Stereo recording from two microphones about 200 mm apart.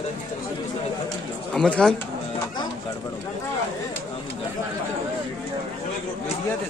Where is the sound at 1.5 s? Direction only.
5° left (ahead or behind).